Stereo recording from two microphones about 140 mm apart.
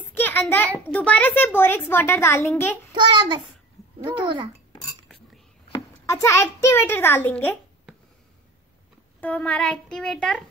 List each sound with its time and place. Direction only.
0.2 s a child's voice: 15° left (ahead or behind)
2.9 s child singing: 30° right (ahead or behind)
5.7 s a child's voice: 20° left (ahead or behind)
9.2 s a child's voice: 10° left (ahead or behind)